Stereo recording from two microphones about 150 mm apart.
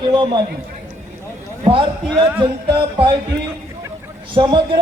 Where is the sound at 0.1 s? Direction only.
30° right (ahead or behind).